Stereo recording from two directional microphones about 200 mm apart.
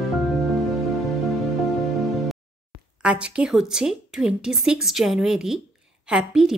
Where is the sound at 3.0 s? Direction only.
5° right (ahead or behind).